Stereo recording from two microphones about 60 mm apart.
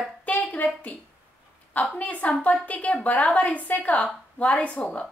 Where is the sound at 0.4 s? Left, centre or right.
Centre.